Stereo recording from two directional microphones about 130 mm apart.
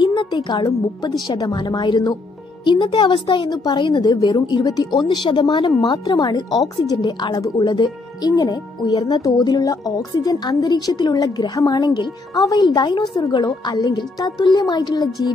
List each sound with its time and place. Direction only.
0.0 s speech: 35° left (ahead or behind)